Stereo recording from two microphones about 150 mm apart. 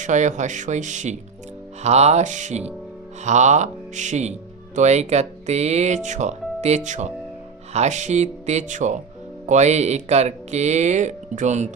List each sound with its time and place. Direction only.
0.0 s speech: 55° right (ahead or behind)